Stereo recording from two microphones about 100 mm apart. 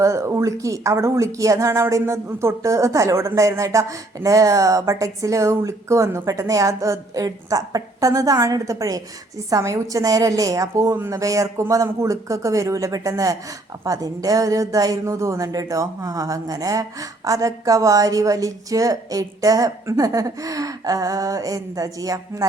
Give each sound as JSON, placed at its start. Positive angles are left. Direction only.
{"t": 0.0, "sound": "a woman's voice", "side_deg": -30}